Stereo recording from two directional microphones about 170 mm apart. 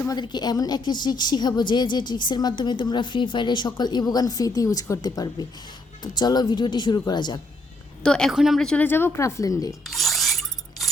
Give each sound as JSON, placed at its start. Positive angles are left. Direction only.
{"t": 0.0, "sound": "a woman's voice", "side_deg": 25}
{"t": 8.0, "sound": "a woman's voice", "side_deg": 5}
{"t": 9.8, "sound": "a sound", "side_deg": 0}